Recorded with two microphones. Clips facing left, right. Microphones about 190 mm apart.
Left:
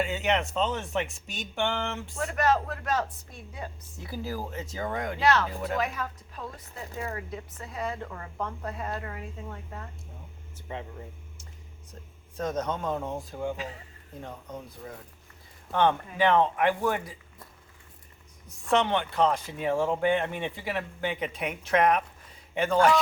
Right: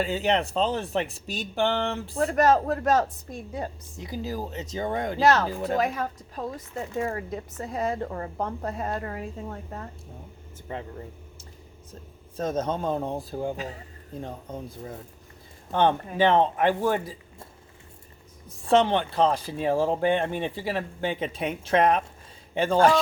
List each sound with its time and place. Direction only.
0.0 s speech: 35° right (ahead or behind)
4.0 s speech: 15° right (ahead or behind); by 9.9 s 40° right (ahead or behind)
12.4 s speech: 30° right (ahead or behind)
18.6 s speech: 30° right (ahead or behind)